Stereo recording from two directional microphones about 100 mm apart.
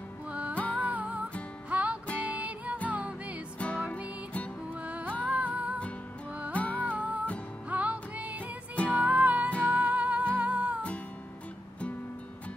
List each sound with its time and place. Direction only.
0.3 s music: 15° right (ahead or behind)
0.6 s music: 15° left (ahead or behind)
0.8 s music: 15° right (ahead or behind)
3.5 s music: 15° left (ahead or behind)
4.8 s music: 15° right (ahead or behind)
6.5 s music: 15° left (ahead or behind)
6.8 s music: 15° right (ahead or behind)